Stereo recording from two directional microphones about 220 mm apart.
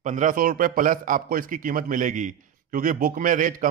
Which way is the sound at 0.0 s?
35° right (ahead or behind).